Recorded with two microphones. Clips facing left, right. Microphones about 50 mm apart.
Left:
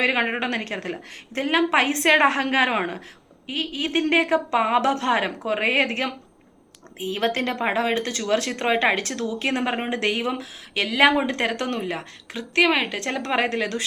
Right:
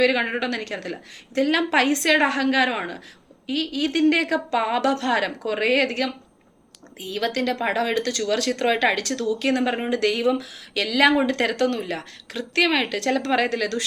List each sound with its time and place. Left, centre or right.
0.0 s a woman's voice: left
11.3 s speech: centre